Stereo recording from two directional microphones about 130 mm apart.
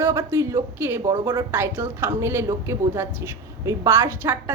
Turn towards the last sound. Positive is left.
turn(degrees=-15)  # may be behind; listen again after turning